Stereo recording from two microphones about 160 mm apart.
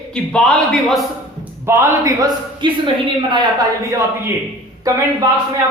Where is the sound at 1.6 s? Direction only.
15° right (ahead or behind).